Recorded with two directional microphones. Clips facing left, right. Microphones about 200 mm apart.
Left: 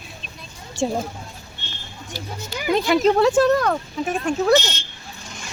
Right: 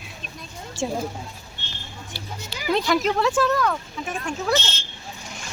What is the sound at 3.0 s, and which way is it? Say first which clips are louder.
Speech: left 6 dB; 35° left (ahead or behind).